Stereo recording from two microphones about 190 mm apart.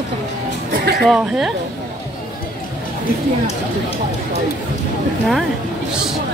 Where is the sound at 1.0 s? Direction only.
Centre (ahead or behind).